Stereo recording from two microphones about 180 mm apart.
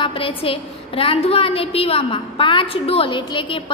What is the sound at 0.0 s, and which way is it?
A woman's voice, 30° left (ahead or behind).